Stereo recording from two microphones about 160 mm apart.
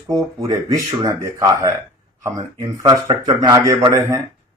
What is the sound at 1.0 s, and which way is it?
Speech, 20° right (ahead or behind).